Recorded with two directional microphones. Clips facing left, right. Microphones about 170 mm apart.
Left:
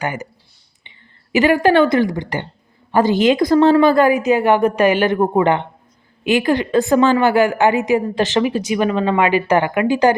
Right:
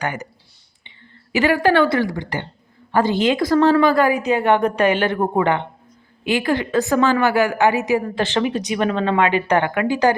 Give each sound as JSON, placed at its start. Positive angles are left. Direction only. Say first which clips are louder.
{"t": 0.9, "sound": "a sound", "louder": "left 4 dB", "side_deg": 15}
{"t": 2.0, "sound": "a woman's voice", "louder": "left 4 dB", "side_deg": 20}
{"t": 4.3, "sound": "a woman's voice", "louder": "left 3 dB", "side_deg": 5}
{"t": 8.3, "sound": "speech", "louder": "left 3 dB", "side_deg": 5}